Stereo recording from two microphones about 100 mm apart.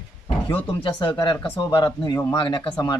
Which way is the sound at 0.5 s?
60° left (ahead or behind).